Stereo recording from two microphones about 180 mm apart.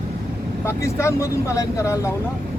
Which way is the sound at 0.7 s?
15° left (ahead or behind).